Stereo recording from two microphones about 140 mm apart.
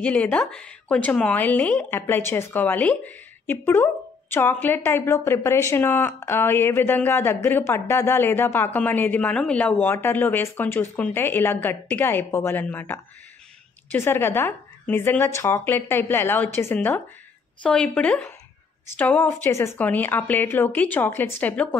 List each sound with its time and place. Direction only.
0.0 s speech: 10° left (ahead or behind)